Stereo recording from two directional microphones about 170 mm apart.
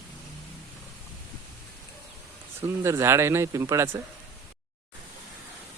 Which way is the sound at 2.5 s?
15° right (ahead or behind).